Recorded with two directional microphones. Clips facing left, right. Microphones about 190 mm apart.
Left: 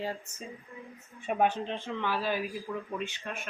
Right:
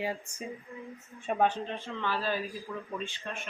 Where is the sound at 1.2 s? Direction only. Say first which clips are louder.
Even; 10° left (ahead or behind).